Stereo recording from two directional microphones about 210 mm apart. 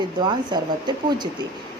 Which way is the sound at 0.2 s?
20° right (ahead or behind).